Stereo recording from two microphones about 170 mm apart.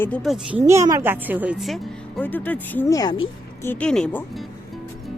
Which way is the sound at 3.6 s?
10° left (ahead or behind).